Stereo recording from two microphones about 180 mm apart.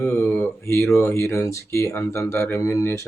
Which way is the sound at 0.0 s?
10° left (ahead or behind).